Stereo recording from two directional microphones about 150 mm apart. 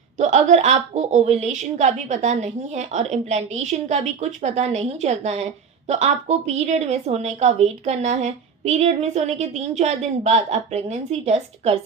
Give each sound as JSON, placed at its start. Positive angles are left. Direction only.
{"t": 0.2, "sound": "a woman's voice", "side_deg": -50}